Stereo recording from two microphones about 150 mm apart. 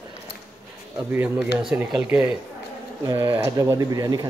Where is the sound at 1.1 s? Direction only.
10° right (ahead or behind).